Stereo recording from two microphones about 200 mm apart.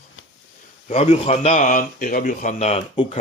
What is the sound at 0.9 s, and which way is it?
Speech, 35° left (ahead or behind).